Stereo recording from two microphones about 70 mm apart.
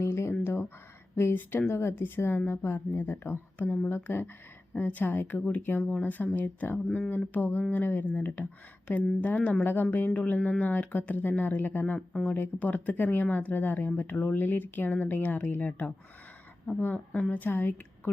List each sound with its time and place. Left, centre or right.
0.0 s a sound: left
1.1 s a woman's voice: left
3.6 s speech: centre
3.8 s a woman's voice: left
11.9 s speech: centre
12.3 s speech: left